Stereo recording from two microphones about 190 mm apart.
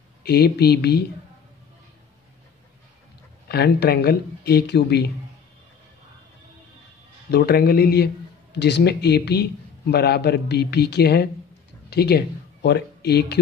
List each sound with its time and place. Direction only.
0.2 s speech: 55° left (ahead or behind)
3.4 s speech: 55° left (ahead or behind)
7.2 s speech: 55° left (ahead or behind)